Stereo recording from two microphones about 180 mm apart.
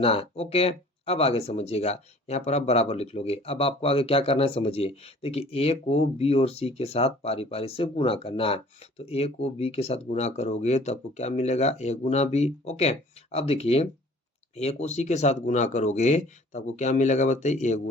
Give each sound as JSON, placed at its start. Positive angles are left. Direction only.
{"t": 0.0, "sound": "speech", "side_deg": 30}